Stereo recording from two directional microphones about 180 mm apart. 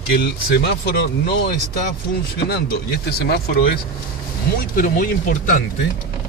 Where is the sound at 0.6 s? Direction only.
65° left (ahead or behind).